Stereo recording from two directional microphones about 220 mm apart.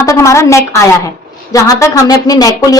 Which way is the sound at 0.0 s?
15° left (ahead or behind).